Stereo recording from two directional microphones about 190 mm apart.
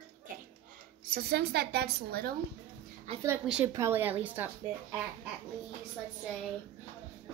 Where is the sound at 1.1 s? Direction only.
55° right (ahead or behind).